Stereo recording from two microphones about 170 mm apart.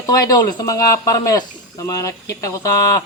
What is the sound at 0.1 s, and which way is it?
Speech, 20° left (ahead or behind).